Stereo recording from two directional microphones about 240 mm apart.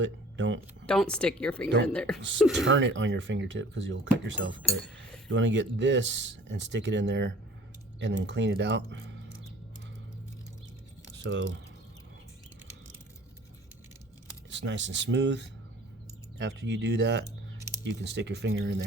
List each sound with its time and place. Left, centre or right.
0.0 s speech: right
0.9 s speech: centre
2.6 s speech: right
11.1 s speech: right
14.5 s speech: right